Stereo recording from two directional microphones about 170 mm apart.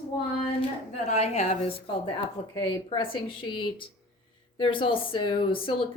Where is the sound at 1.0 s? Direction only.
40° left (ahead or behind).